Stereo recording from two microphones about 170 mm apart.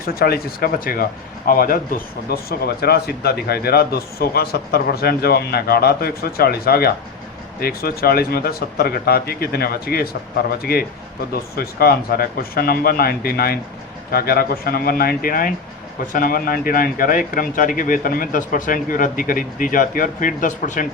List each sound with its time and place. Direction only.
0.0 s a man's voice: 65° left (ahead or behind); by 20.8 s 50° left (ahead or behind)